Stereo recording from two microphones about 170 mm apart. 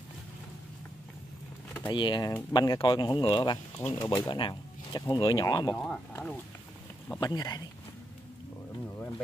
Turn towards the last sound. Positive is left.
turn(degrees=25)  # may be behind; listen again after turning